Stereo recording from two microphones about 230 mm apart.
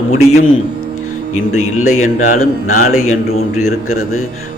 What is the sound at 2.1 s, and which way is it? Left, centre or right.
Speech, left.